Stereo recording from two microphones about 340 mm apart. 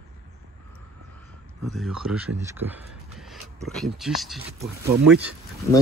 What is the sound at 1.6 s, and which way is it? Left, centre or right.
Speech, centre.